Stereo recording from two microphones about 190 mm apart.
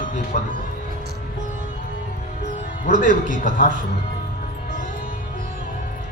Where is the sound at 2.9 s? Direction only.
45° right (ahead or behind).